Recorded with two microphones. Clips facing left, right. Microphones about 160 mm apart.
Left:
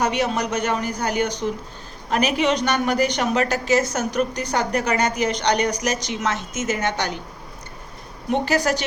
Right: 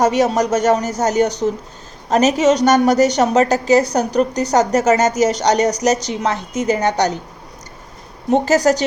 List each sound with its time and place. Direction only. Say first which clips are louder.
0.0 s a woman's voice: right 7 dB; 45° right (ahead or behind)
8.3 s a woman's voice: right 7 dB; 40° right (ahead or behind)